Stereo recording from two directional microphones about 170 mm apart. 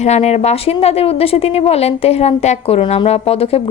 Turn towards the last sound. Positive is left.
turn(degrees=35)  # may be behind; listen again after turning